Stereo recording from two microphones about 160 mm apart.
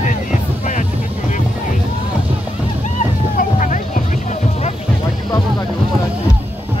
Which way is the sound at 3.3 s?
50° left (ahead or behind).